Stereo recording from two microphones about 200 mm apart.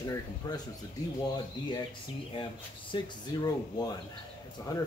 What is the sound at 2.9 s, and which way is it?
Speech, 20° left (ahead or behind).